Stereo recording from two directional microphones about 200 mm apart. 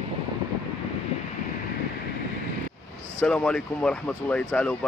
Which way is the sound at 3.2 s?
5° left (ahead or behind).